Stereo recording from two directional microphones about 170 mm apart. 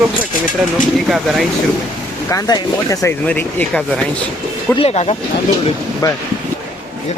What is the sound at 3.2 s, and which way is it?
Speech, 10° left (ahead or behind).